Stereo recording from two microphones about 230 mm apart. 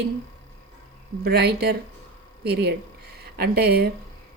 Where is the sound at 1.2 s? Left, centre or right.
Right.